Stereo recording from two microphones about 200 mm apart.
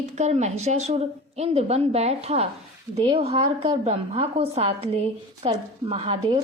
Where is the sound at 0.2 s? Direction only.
35° right (ahead or behind).